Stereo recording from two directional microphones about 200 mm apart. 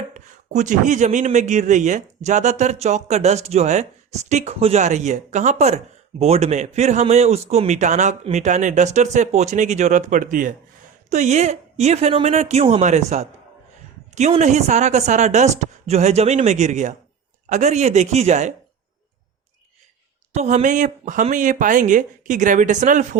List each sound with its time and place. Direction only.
0.1 s speech: 40° right (ahead or behind)
20.3 s speech: 35° right (ahead or behind)